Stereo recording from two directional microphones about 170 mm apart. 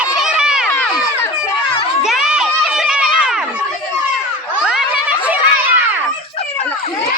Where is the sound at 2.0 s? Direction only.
5° right (ahead or behind).